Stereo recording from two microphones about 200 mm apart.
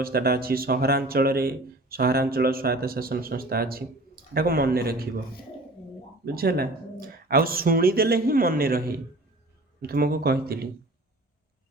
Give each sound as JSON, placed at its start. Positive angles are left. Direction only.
{"t": 0.0, "sound": "speech", "side_deg": -50}
{"t": 6.2, "sound": "speech", "side_deg": -50}